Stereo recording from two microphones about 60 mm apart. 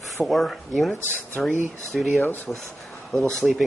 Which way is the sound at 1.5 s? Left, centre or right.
Right.